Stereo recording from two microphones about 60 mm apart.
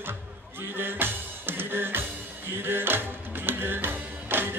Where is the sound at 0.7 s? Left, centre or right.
Right.